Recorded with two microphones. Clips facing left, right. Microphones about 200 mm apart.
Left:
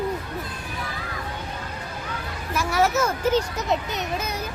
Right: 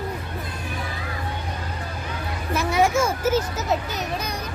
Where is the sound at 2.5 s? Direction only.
15° right (ahead or behind); by 4.3 s centre (ahead or behind).